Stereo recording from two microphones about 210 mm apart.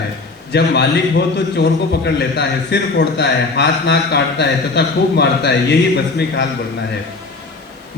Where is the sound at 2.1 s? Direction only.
55° left (ahead or behind).